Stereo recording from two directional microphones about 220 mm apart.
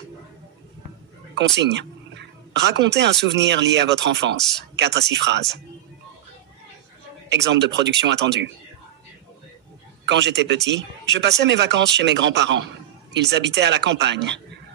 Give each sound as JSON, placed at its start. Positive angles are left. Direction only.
{"t": 1.3, "sound": "speech", "side_deg": -50}
{"t": 7.2, "sound": "speech", "side_deg": -50}
{"t": 10.0, "sound": "speech", "side_deg": -50}